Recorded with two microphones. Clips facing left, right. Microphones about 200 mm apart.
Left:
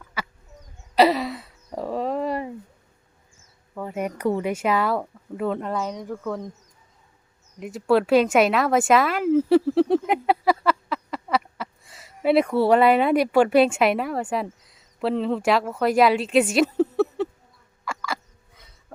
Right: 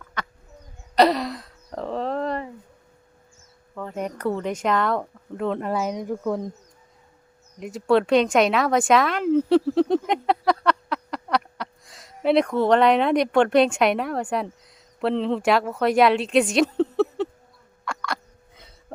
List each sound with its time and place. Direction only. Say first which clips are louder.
0.2 s a sound: even; 5° left (ahead or behind)
3.8 s speech: left 1 dB; 10° left (ahead or behind); by 6.5 s 15° right (ahead or behind)
7.6 s a woman's voice: even; centre (ahead or behind)
17.8 s hiccup: even; 5° left (ahead or behind)